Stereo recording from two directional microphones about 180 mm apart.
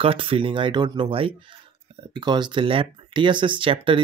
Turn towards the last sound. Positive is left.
turn(degrees=-30)  # may be behind; listen again after turning